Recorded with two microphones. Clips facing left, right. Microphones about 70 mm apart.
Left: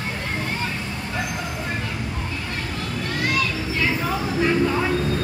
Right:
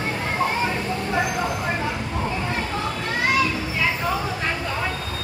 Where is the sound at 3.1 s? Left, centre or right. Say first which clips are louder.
Right 3 dB; right.